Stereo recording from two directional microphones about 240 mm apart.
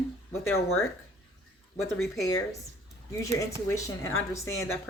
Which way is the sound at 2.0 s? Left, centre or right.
Centre.